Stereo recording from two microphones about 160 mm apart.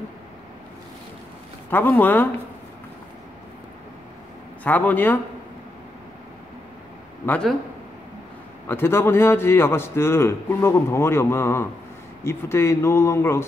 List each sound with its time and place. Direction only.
1.7 s a man's voice: 10° left (ahead or behind)
4.6 s a man's voice: 10° left (ahead or behind)
7.2 s a man's voice: 5° left (ahead or behind)
8.6 s a man's voice: 15° left (ahead or behind)